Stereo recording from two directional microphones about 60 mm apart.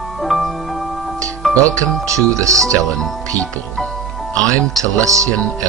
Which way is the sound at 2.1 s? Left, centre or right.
Right.